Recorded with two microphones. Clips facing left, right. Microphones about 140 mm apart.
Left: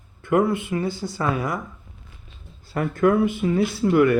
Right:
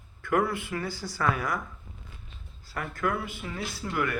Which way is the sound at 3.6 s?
60° left (ahead or behind).